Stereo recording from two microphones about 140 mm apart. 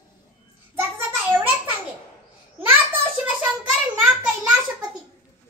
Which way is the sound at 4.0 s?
10° right (ahead or behind).